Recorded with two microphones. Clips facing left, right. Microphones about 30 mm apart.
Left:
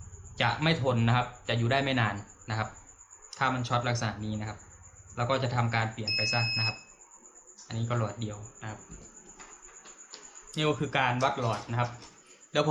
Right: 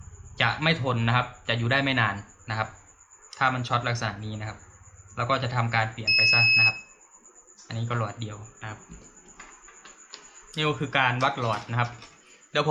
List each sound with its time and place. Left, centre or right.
0.3 s a man's voice: centre
6.3 s a man's voice: right
7.7 s a man's voice: centre
9.4 s a sound: right
11.2 s speech: right
11.9 s a sound: right